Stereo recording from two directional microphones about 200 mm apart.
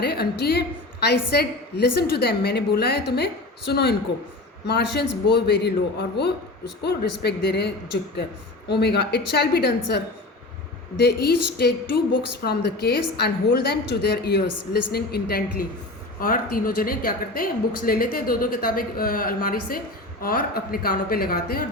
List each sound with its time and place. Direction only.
0.0 s a woman's voice: 55° left (ahead or behind)
8.7 s a woman's voice: 55° left (ahead or behind)